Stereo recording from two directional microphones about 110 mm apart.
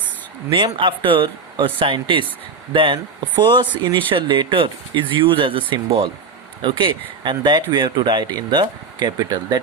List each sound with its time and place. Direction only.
0.5 s speech: 50° right (ahead or behind)